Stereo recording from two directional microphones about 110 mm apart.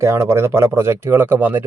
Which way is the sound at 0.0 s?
25° right (ahead or behind).